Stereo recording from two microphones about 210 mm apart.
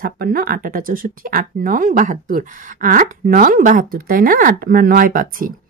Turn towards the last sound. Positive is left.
turn(degrees=-40)  # may be behind; listen again after turning